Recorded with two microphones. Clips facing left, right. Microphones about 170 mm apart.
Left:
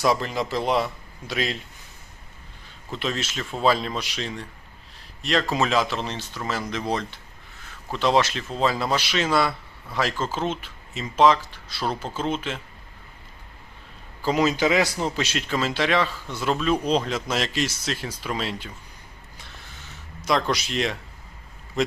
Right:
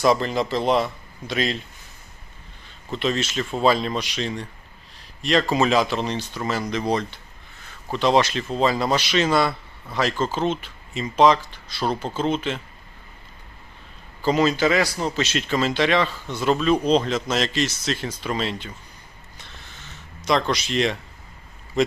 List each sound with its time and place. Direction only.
0.0 s a man's voice: 5° left (ahead or behind)
2.9 s a man's voice: 5° left (ahead or behind)
14.2 s a man's voice: 10° left (ahead or behind)
20.2 s a man's voice: 5° left (ahead or behind)